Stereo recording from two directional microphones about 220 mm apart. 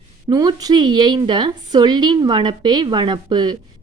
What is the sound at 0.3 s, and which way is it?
A woman's voice, 15° right (ahead or behind).